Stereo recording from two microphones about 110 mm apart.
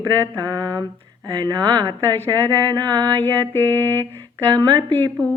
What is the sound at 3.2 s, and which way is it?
Mantra, 20° left (ahead or behind).